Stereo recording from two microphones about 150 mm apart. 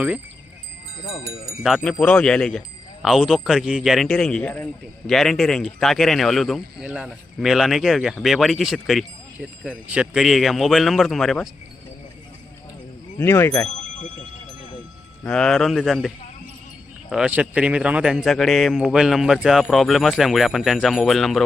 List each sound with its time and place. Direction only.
1.6 s speech: centre (ahead or behind)
13.1 s speech: 15° left (ahead or behind)
15.2 s speech: 5° left (ahead or behind)